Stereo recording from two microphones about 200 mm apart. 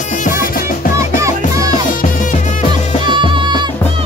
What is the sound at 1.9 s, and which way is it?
Music, 40° left (ahead or behind).